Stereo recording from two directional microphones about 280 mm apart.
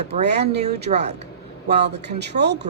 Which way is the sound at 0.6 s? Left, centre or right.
Right.